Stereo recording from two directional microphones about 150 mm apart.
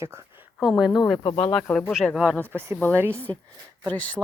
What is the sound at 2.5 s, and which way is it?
Speech, 15° right (ahead or behind).